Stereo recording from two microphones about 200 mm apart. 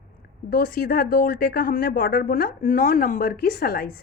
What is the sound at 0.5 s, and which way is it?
Speech, 45° left (ahead or behind).